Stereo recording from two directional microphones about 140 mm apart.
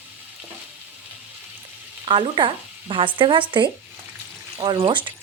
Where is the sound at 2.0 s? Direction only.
35° right (ahead or behind).